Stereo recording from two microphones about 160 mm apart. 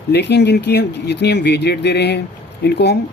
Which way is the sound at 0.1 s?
90° left.